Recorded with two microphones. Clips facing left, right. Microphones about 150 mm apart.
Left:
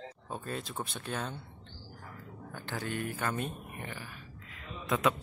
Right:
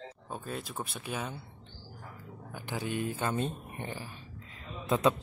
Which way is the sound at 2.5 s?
10° right (ahead or behind).